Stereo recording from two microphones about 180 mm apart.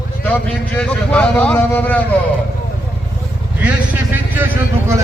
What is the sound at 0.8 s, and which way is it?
Speech, 5° left (ahead or behind).